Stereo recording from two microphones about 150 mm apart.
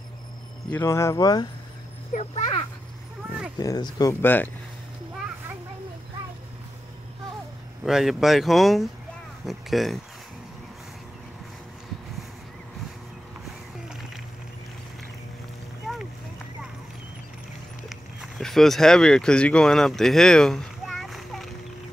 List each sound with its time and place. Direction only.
0.7 s speech: 15° left (ahead or behind)
2.1 s a child's voice: 45° left (ahead or behind)
3.5 s speech: 25° left (ahead or behind)
7.8 s speech: centre (ahead or behind)
15.8 s a sound: 5° right (ahead or behind)
17.8 s a sound: centre (ahead or behind)